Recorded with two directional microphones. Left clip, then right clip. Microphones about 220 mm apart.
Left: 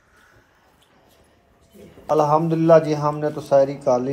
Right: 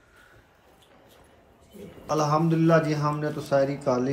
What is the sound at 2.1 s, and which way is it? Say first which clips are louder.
A man's voice: left 6 dB; 15° right (ahead or behind).